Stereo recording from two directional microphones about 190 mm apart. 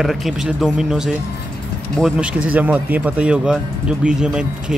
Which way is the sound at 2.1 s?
5° right (ahead or behind).